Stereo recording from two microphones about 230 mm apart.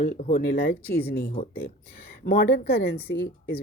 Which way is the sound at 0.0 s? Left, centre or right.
Left.